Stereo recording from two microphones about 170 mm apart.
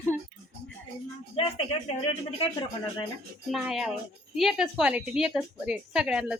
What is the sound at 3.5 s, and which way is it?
Speech, centre (ahead or behind).